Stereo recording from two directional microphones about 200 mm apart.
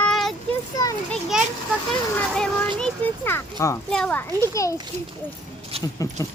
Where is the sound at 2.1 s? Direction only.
5° left (ahead or behind).